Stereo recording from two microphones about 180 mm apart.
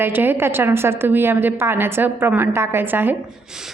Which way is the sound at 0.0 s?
10° right (ahead or behind).